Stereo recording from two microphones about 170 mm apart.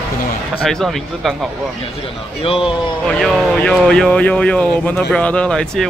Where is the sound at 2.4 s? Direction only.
35° left (ahead or behind).